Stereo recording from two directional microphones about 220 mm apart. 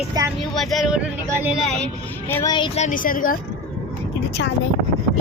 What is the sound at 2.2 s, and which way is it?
Speech, 15° left (ahead or behind).